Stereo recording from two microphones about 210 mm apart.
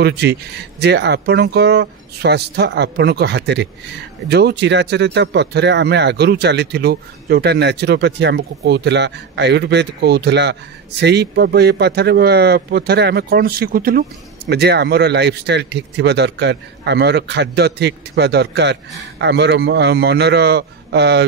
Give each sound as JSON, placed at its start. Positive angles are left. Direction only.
{"t": 0.0, "sound": "speech", "side_deg": -50}